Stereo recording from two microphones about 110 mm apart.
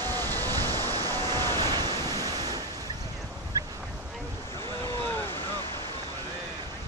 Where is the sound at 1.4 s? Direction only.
35° right (ahead or behind).